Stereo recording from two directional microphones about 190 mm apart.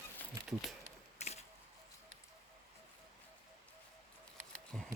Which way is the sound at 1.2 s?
35° left (ahead or behind).